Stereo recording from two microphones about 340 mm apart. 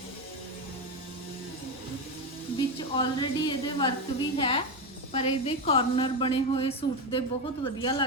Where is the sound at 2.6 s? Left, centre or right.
Centre.